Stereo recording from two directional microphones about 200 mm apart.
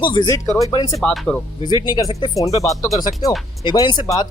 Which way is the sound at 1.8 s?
20° left (ahead or behind).